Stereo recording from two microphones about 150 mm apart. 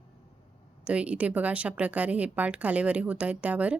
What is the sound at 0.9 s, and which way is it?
A woman's voice, 10° right (ahead or behind).